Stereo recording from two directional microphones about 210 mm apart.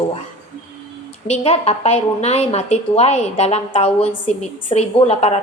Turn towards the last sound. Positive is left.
turn(degrees=30)  # may be behind; listen again after turning